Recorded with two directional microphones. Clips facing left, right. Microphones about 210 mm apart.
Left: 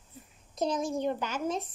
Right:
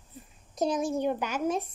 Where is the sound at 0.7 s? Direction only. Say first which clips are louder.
Right 2 dB; 10° right (ahead or behind).